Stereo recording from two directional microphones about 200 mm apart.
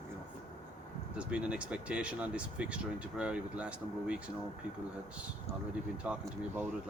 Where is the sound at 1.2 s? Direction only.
5° right (ahead or behind).